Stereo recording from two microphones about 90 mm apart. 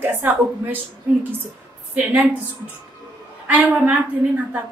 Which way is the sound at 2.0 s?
20° right (ahead or behind).